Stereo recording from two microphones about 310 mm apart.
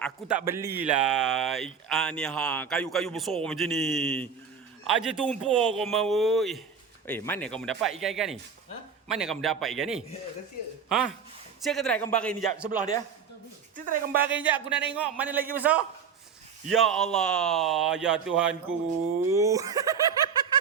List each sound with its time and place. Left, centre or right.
0.0 s a man's voice: centre
13.7 s speech: right
14.2 s speech: centre